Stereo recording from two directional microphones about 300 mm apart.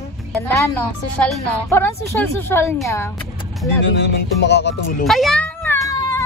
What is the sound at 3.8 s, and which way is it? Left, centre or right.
Speech, left.